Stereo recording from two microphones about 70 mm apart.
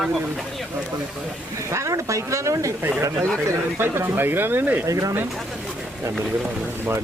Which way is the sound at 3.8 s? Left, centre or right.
Right.